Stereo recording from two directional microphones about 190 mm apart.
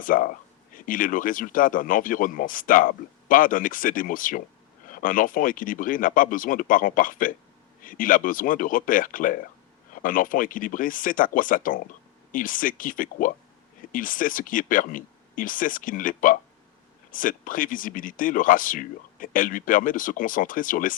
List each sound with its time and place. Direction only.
0.0 s a man's voice: 45° left (ahead or behind)